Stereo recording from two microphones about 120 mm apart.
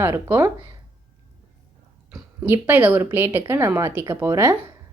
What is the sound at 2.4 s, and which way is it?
A woman's voice, 15° right (ahead or behind).